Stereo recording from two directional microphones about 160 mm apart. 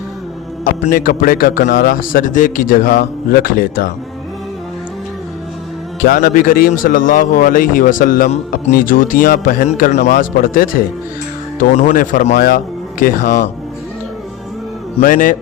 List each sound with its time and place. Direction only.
0.6 s a man's voice: 65° left (ahead or behind)
6.0 s a man's voice: 60° left (ahead or behind)
11.7 s a man's voice: 50° left (ahead or behind)
15.0 s a man's voice: 55° left (ahead or behind)